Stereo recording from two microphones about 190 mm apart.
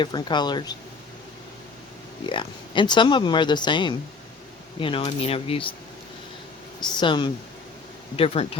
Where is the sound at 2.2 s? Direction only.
25° left (ahead or behind).